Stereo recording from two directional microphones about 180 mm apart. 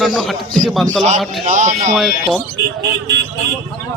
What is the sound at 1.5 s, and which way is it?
Speech, 40° right (ahead or behind).